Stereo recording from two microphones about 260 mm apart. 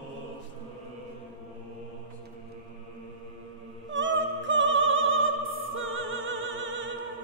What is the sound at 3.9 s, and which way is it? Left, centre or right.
Opera, right.